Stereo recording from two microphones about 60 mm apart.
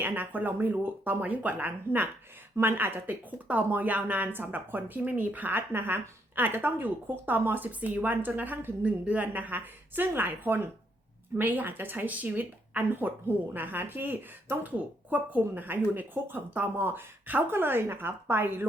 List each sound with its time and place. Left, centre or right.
0.0 s a woman's voice: right